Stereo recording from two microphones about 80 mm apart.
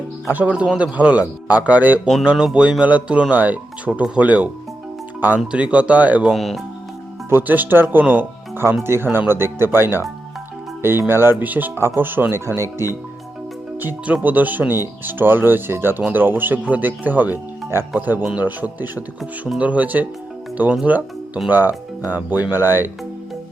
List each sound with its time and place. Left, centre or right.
0.3 s speech: centre
2.2 s speech: centre
6.2 s speech: centre
7.3 s speech: right
11.1 s speech: right
13.7 s speech: right
17.9 s speech: centre